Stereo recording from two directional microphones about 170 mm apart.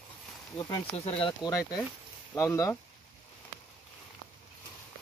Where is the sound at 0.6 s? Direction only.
25° left (ahead or behind).